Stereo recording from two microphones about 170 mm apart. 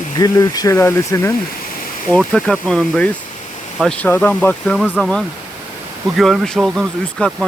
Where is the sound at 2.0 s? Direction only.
Centre (ahead or behind).